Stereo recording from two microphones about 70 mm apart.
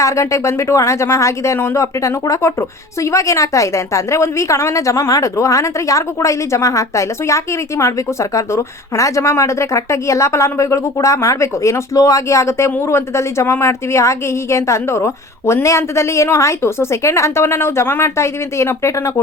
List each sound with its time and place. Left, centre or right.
0.0 s a woman's voice: left